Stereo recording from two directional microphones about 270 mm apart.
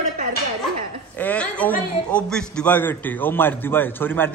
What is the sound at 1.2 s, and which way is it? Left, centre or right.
A man's voice, centre.